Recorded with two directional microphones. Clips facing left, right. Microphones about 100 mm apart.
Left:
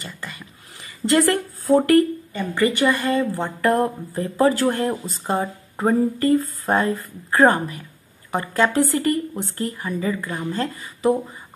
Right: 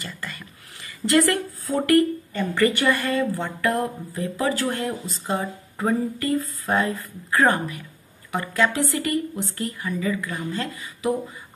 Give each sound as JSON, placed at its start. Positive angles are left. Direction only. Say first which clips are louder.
{"t": 0.8, "sound": "a sound", "louder": "left 1 dB", "side_deg": 25}
{"t": 1.2, "sound": "speech", "louder": "left 3 dB", "side_deg": 40}
{"t": 2.3, "sound": "a woman's voice", "louder": "left 1 dB", "side_deg": 20}